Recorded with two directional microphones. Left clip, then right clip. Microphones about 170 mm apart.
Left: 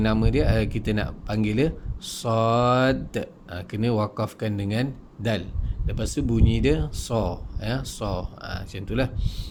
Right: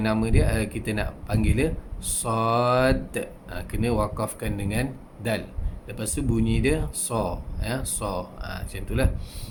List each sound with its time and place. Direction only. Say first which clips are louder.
0.0 s speech: left 2 dB; 35° left (ahead or behind)